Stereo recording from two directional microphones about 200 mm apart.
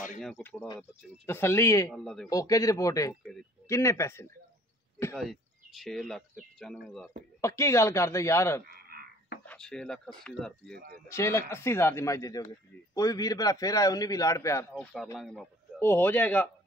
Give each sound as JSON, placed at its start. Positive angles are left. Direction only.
{"t": 0.2, "sound": "a man's voice", "side_deg": 5}
{"t": 5.1, "sound": "speech", "side_deg": 0}
{"t": 7.4, "sound": "a man's voice", "side_deg": 15}
{"t": 8.6, "sound": "frog", "side_deg": -50}
{"t": 9.4, "sound": "speech", "side_deg": 5}
{"t": 10.7, "sound": "speech", "side_deg": -50}
{"t": 11.1, "sound": "a man's voice", "side_deg": 15}
{"t": 15.8, "sound": "a man's voice", "side_deg": 10}